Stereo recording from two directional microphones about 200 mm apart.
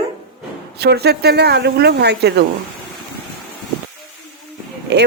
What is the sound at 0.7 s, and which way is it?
Speech, 55° right (ahead or behind).